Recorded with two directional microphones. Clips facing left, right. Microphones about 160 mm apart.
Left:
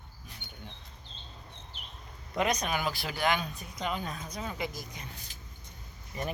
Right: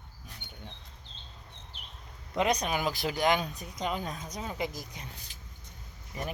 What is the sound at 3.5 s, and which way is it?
Speech, 40° right (ahead or behind).